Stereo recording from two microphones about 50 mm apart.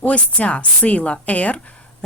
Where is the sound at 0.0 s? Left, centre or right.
Left.